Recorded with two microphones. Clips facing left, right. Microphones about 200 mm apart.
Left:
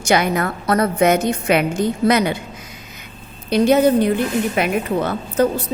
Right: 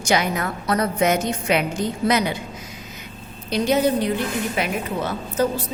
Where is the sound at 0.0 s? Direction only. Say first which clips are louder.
Left 4 dB; 55° left (ahead or behind).